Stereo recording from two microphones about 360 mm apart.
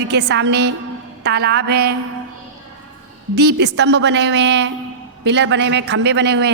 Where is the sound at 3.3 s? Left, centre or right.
Right.